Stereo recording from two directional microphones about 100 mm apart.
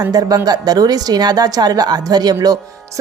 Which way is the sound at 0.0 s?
40° right (ahead or behind).